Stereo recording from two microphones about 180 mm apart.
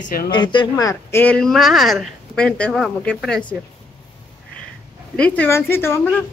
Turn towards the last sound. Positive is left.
turn(degrees=10)  # may be behind; listen again after turning